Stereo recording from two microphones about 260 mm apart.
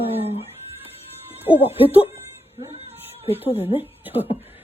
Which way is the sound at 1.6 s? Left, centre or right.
Left.